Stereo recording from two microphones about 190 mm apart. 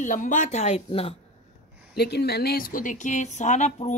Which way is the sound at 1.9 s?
60° left (ahead or behind).